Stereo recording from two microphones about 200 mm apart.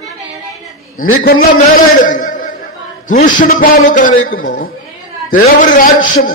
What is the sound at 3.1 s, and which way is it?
A man's voice, 45° left (ahead or behind).